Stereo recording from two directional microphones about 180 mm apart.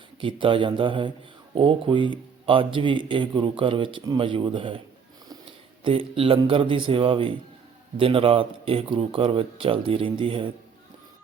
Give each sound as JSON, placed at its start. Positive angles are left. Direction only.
{"t": 0.2, "sound": "speech", "side_deg": -30}
{"t": 5.8, "sound": "speech", "side_deg": -30}